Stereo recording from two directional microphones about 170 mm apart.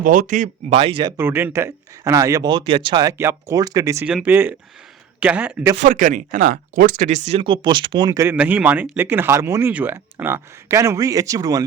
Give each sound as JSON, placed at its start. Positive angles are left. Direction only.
{"t": 0.0, "sound": "speech", "side_deg": -55}
{"t": 0.8, "sound": "speech", "side_deg": -30}
{"t": 1.1, "sound": "speech", "side_deg": -10}
{"t": 4.0, "sound": "speech", "side_deg": -5}
{"t": 5.7, "sound": "speech", "side_deg": -45}